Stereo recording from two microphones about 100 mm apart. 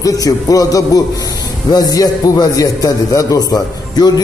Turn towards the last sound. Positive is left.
turn(degrees=40)  # may be behind; listen again after turning